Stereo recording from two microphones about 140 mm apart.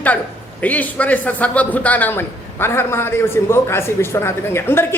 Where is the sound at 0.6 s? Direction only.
10° left (ahead or behind).